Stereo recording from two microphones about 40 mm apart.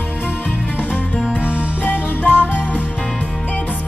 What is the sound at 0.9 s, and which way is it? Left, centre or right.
Music, left.